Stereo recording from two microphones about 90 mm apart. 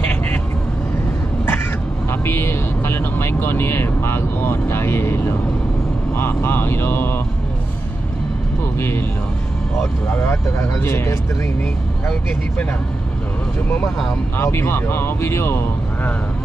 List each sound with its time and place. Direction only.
2.2 s speech: 25° left (ahead or behind)
8.7 s speech: 25° left (ahead or behind)
10.1 s speech: 30° left (ahead or behind)
14.4 s speech: 30° left (ahead or behind)